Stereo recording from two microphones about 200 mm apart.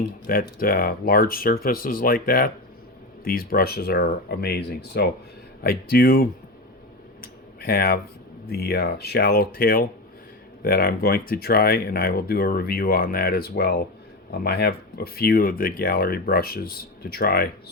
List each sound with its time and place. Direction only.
0.3 s speech: 45° left (ahead or behind)
7.2 s a sound: 50° left (ahead or behind)
8.4 s speech: 50° left (ahead or behind)